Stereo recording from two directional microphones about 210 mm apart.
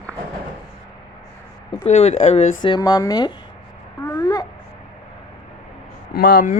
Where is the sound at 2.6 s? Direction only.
20° left (ahead or behind).